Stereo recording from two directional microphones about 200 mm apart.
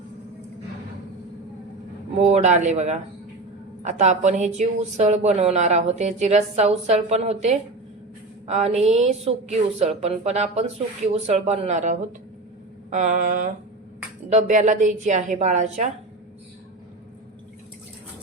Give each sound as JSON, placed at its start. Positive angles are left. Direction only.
{"t": 2.1, "sound": "a woman's voice", "side_deg": -35}